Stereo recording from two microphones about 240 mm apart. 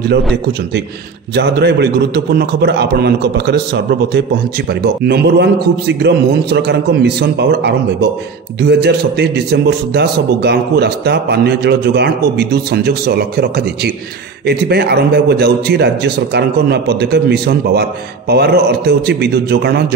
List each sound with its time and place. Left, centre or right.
1.3 s a man's voice: right